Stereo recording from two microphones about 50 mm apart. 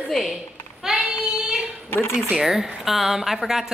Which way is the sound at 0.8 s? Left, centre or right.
Centre.